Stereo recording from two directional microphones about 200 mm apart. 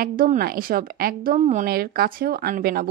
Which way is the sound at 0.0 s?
45° right (ahead or behind).